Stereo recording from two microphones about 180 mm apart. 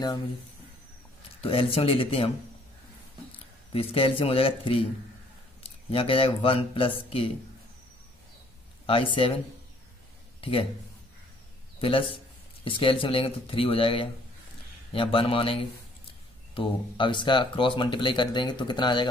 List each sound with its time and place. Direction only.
1.4 s speech: 30° left (ahead or behind)
8.8 s speech: 30° left (ahead or behind)
10.4 s speech: 30° left (ahead or behind)
11.8 s speech: 30° left (ahead or behind)